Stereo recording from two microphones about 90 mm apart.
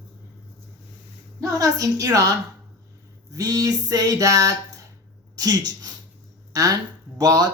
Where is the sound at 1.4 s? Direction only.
40° right (ahead or behind).